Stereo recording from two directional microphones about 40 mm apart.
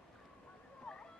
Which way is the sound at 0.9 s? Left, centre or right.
Centre.